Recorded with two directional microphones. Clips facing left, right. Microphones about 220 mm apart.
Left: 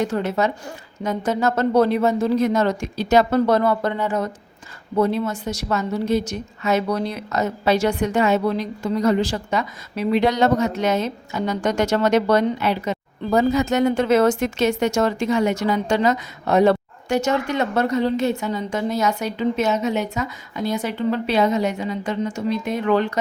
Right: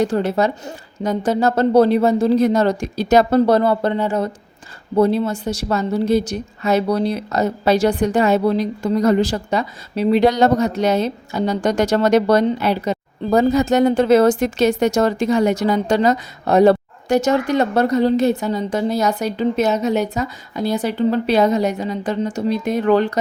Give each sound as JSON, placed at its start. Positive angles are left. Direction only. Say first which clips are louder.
{"t": 0.0, "sound": "a woman's voice", "louder": "right 4 dB", "side_deg": -35}